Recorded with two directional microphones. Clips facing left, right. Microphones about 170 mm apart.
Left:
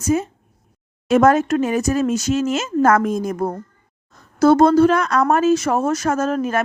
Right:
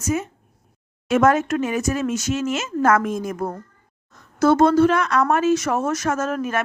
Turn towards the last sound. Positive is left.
turn(degrees=35)  # may be behind; listen again after turning